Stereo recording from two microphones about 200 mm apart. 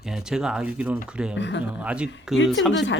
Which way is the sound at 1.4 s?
60° left (ahead or behind).